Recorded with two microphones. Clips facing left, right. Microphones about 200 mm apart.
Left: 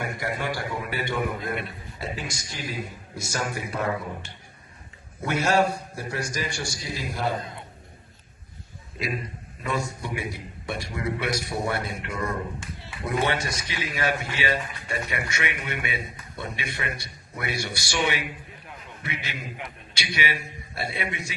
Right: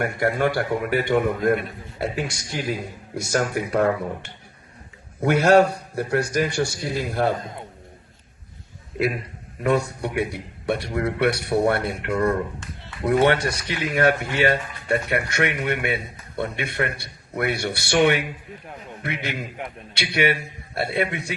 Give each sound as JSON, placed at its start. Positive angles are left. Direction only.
{"t": 0.0, "sound": "a man's voice", "side_deg": -55}
{"t": 9.6, "sound": "speech", "side_deg": -60}